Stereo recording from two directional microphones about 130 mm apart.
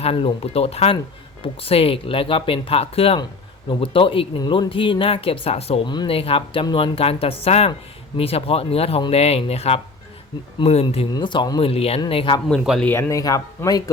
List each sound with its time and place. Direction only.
0.0 s speech: 45° left (ahead or behind)
11.1 s a man's voice: 40° left (ahead or behind)
11.6 s speech: 50° left (ahead or behind)
12.5 s speech: centre (ahead or behind)
12.8 s speech: 20° left (ahead or behind)